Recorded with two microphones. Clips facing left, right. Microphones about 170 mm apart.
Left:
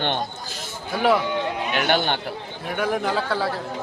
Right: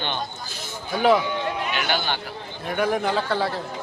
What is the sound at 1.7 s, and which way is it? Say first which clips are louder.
Speech: left 4 dB; 60° left (ahead or behind).